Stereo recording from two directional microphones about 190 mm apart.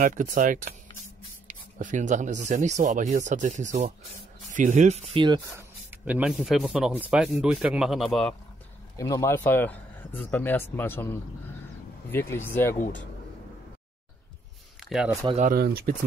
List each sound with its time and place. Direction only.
0.0 s speech: 45° right (ahead or behind)
1.0 s spray: 40° right (ahead or behind)
2.4 s speech: 40° right (ahead or behind); by 8.4 s 5° left (ahead or behind)
8.9 s speech: 15° left (ahead or behind)
14.8 s speech: 5° right (ahead or behind)
15.2 s speech: 35° right (ahead or behind)
15.5 s speech: 55° right (ahead or behind)